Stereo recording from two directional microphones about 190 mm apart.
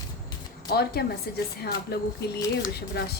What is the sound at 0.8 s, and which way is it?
A woman's voice, 55° left (ahead or behind).